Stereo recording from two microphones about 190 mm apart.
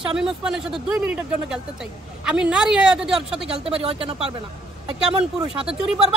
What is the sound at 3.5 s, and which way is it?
Speech, 30° right (ahead or behind).